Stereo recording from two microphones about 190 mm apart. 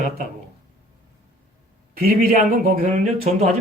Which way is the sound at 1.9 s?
50° right (ahead or behind).